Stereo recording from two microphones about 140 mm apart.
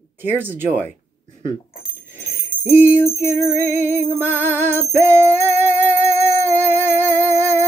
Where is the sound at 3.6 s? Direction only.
65° right (ahead or behind).